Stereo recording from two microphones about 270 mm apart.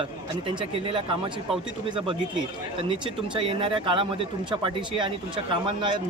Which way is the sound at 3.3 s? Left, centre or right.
Centre.